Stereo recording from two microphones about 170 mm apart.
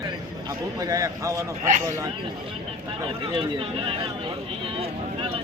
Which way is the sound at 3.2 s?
30° right (ahead or behind).